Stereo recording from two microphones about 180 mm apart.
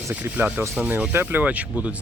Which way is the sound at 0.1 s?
10° right (ahead or behind).